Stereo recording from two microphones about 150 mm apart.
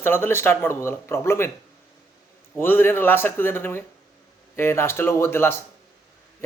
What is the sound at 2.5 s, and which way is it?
A man's voice, 15° left (ahead or behind).